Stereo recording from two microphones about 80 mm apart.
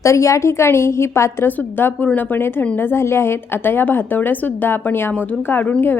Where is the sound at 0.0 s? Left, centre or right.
Left.